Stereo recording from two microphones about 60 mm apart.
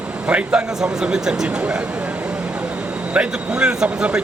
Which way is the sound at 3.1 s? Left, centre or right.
Centre.